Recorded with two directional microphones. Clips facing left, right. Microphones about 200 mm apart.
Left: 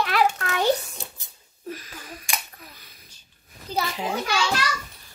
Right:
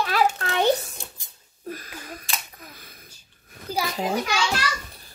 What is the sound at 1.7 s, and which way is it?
Speech, 50° right (ahead or behind).